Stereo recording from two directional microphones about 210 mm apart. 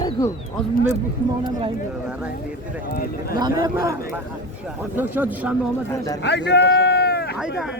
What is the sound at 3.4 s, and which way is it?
A man's voice, 20° right (ahead or behind).